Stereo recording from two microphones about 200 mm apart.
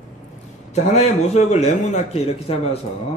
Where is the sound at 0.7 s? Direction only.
35° left (ahead or behind).